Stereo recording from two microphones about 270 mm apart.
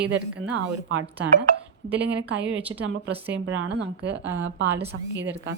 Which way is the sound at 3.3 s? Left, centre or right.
Right.